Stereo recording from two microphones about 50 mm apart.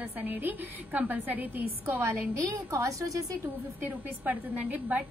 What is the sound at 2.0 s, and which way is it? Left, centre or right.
A woman's voice, right.